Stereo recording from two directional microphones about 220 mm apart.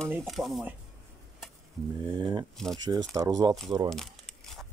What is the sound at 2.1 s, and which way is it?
Speech, 20° right (ahead or behind).